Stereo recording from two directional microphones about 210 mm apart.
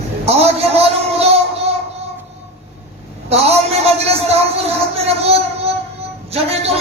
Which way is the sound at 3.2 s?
30° right (ahead or behind).